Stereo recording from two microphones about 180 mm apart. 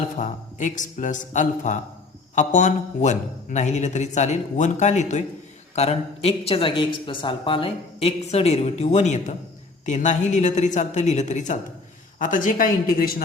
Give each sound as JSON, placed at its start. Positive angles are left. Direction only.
{"t": 0.2, "sound": "speech", "side_deg": 45}